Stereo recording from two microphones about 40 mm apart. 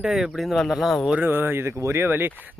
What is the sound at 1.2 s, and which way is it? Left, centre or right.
Speech, right.